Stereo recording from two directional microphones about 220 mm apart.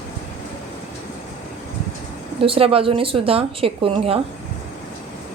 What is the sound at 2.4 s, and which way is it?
Speech, 25° right (ahead or behind).